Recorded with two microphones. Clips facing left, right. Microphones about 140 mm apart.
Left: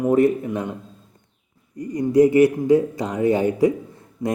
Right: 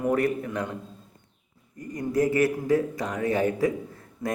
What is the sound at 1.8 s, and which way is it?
Speech, 20° left (ahead or behind).